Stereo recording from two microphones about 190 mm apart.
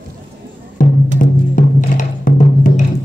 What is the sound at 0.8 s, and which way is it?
Music, 45° left (ahead or behind).